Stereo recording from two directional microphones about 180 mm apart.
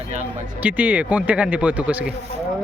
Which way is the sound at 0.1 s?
40° right (ahead or behind).